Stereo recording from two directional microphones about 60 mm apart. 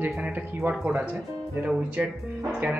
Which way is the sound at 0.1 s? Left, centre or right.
Right.